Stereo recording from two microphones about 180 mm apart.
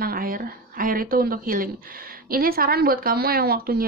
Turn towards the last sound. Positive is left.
turn(degrees=-55)  # may be behind; listen again after turning